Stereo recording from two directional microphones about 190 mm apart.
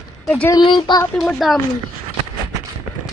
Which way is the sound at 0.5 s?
25° left (ahead or behind).